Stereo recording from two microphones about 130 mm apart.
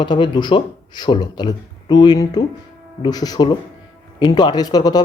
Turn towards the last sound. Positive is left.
turn(degrees=30)  # may be behind; listen again after turning